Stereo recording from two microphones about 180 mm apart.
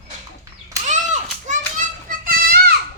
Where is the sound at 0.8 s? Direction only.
40° right (ahead or behind).